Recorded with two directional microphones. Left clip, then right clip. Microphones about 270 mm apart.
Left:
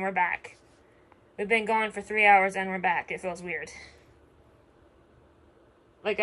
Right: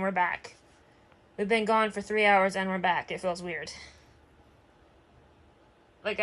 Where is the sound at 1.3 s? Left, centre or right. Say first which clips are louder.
Even; right.